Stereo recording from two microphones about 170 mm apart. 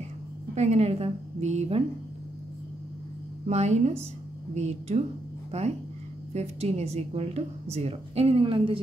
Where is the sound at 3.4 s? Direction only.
40° right (ahead or behind).